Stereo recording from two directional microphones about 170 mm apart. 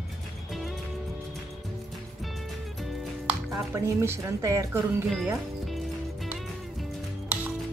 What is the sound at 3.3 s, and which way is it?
Speech, 15° right (ahead or behind).